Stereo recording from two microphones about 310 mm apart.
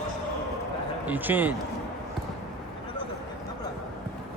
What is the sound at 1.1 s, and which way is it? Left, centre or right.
Speech, centre.